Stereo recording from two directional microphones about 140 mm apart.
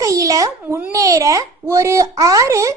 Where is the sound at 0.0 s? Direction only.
25° right (ahead or behind).